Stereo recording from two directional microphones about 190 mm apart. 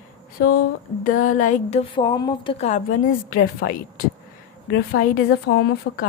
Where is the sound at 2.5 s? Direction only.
40° left (ahead or behind).